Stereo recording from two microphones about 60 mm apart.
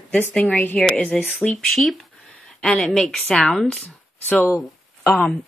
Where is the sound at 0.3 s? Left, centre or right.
Centre.